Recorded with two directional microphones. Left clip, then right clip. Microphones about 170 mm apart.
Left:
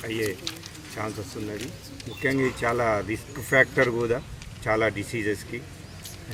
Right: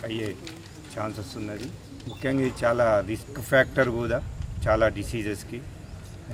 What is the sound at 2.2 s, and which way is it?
Speech, 20° right (ahead or behind).